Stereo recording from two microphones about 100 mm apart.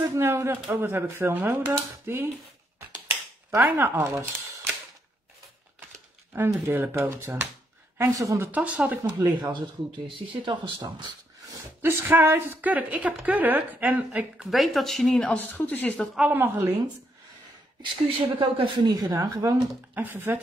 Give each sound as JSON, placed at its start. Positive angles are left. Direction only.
{"t": 0.1, "sound": "speech", "side_deg": -25}
{"t": 3.1, "sound": "a sound", "side_deg": -25}
{"t": 4.0, "sound": "speech", "side_deg": -30}
{"t": 6.3, "sound": "speech", "side_deg": -20}
{"t": 8.0, "sound": "speech", "side_deg": -35}
{"t": 8.4, "sound": "speech", "side_deg": -15}
{"t": 9.4, "sound": "speech", "side_deg": -45}
{"t": 11.8, "sound": "speech", "side_deg": -20}
{"t": 14.5, "sound": "speech", "side_deg": 0}
{"t": 15.3, "sound": "speech", "side_deg": 15}
{"t": 16.2, "sound": "speech", "side_deg": -15}
{"t": 18.4, "sound": "speech", "side_deg": -60}
{"t": 18.9, "sound": "speech", "side_deg": -40}
{"t": 19.9, "sound": "speech", "side_deg": -20}